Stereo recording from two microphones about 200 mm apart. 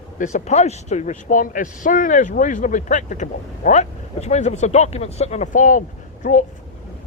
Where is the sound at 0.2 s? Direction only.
35° left (ahead or behind).